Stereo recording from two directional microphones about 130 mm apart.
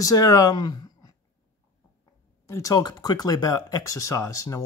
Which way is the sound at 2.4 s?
25° left (ahead or behind).